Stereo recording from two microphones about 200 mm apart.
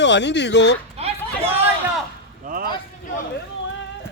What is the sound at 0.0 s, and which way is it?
Speech, 60° left (ahead or behind).